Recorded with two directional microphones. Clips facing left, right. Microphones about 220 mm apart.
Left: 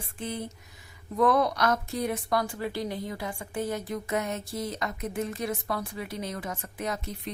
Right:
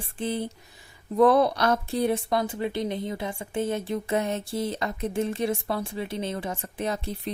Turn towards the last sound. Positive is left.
turn(degrees=-30)  # may be behind; listen again after turning